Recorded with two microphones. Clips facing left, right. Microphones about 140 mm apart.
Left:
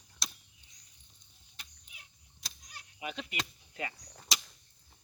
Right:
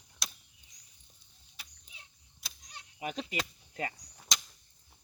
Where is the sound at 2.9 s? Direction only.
40° right (ahead or behind).